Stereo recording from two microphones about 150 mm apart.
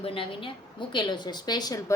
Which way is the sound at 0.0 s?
40° left (ahead or behind).